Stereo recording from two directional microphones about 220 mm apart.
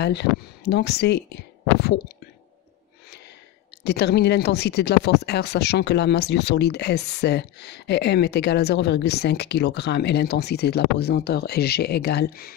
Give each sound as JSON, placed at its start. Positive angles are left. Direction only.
{"t": 0.0, "sound": "speech", "side_deg": 50}
{"t": 3.8, "sound": "speech", "side_deg": 50}